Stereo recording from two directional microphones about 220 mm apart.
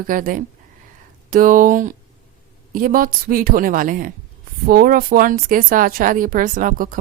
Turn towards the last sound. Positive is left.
turn(degrees=-40)  # may be behind; listen again after turning